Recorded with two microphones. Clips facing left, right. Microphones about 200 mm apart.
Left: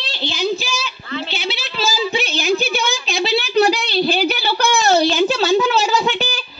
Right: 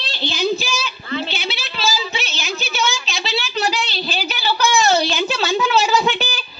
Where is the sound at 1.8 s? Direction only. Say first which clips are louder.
Left 4 dB; 50° left (ahead or behind).